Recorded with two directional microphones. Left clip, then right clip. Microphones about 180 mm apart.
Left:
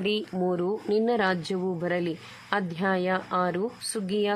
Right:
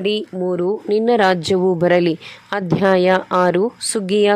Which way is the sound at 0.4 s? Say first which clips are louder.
Right 8 dB; 25° right (ahead or behind).